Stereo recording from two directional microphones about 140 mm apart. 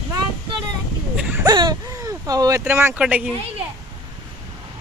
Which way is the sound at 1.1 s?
10° right (ahead or behind).